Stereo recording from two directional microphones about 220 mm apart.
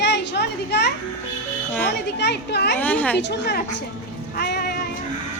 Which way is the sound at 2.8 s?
5° left (ahead or behind).